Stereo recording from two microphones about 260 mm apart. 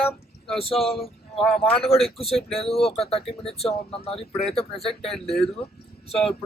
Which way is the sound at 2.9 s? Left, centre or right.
Left.